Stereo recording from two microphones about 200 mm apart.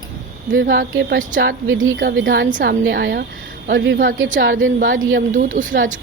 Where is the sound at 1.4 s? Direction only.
75° right (ahead or behind).